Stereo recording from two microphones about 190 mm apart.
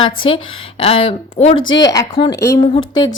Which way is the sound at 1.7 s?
20° left (ahead or behind).